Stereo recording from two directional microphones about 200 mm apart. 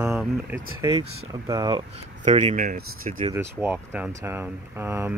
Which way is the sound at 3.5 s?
10° right (ahead or behind).